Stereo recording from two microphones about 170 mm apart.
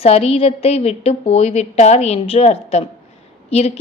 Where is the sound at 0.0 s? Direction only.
35° left (ahead or behind).